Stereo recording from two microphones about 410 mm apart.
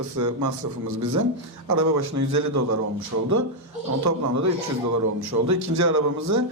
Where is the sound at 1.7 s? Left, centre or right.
Right.